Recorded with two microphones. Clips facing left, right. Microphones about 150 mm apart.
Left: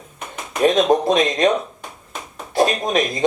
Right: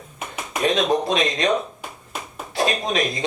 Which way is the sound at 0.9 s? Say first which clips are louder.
Left 4 dB; 45° left (ahead or behind).